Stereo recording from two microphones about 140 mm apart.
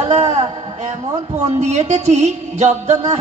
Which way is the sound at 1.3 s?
55° right (ahead or behind).